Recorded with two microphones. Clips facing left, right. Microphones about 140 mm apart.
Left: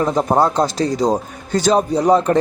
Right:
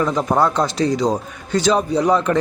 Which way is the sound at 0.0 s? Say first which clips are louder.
Left 2 dB; 35° left (ahead or behind).